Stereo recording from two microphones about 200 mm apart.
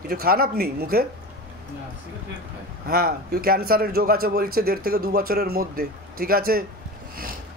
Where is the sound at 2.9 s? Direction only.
50° right (ahead or behind).